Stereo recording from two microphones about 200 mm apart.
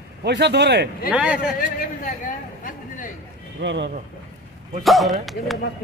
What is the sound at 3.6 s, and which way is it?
Speech, 65° right (ahead or behind).